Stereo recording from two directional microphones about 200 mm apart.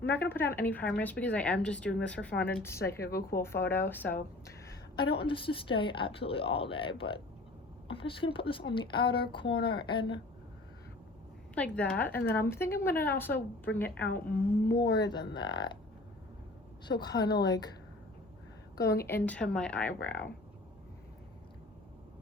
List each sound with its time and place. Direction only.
0.2 s a woman's voice: 10° left (ahead or behind)
3.0 s speech: 50° left (ahead or behind)
3.4 s a woman's voice: 10° left (ahead or behind)
4.9 s speech: 25° left (ahead or behind)
11.5 s a woman's voice: 5° left (ahead or behind)
14.8 s a woman's voice: 55° left (ahead or behind)
15.0 s speech: 20° left (ahead or behind)
16.8 s speech: 20° left (ahead or behind)
17.2 s a woman's voice: 55° left (ahead or behind)
18.9 s a woman's voice: 10° left (ahead or behind)